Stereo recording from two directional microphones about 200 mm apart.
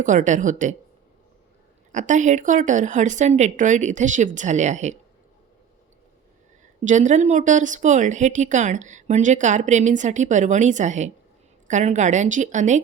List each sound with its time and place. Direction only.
0.0 s speech: 40° right (ahead or behind)
1.9 s speech: 40° right (ahead or behind)
6.8 s speech: 40° right (ahead or behind)